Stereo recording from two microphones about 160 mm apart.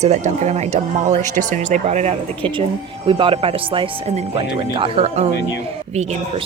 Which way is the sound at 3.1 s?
30° right (ahead or behind).